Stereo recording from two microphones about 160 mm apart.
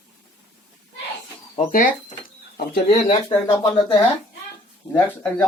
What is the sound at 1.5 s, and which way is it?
Speech, 50° left (ahead or behind).